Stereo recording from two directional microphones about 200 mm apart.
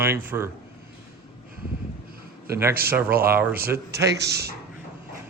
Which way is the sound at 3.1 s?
45° right (ahead or behind).